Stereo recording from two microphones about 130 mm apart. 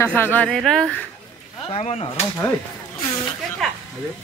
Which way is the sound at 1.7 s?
55° left (ahead or behind).